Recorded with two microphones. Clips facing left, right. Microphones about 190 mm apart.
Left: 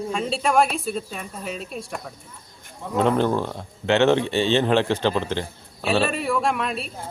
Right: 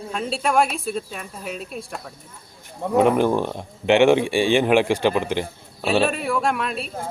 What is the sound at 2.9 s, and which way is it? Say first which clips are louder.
Speech: right 3 dB; 10° right (ahead or behind).